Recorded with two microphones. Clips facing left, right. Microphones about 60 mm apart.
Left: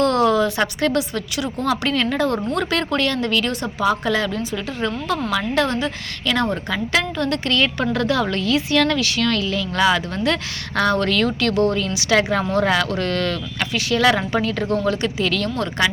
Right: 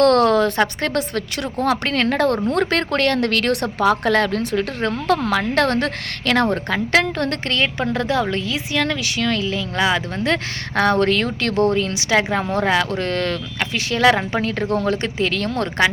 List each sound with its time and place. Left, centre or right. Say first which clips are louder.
0.0 s a sound: right 3 dB; right
0.8 s a woman's voice: left 1 dB; right
7.6 s speech: left 1 dB; right
12.0 s speech: left 2 dB; right